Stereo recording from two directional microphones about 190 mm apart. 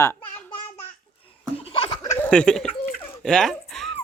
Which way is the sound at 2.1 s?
5° left (ahead or behind).